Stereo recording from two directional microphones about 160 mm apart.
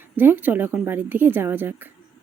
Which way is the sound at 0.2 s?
10° right (ahead or behind).